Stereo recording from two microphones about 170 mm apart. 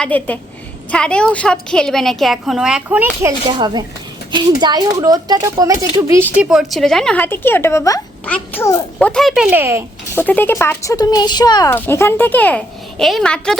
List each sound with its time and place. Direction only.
0.0 s a child's voice: 10° left (ahead or behind); by 3.3 s 10° right (ahead or behind)
3.6 s speech: 25° right (ahead or behind)
6.3 s a child's voice: 5° right (ahead or behind)
10.2 s speech: 10° left (ahead or behind)
11.7 s a child's voice: 15° left (ahead or behind)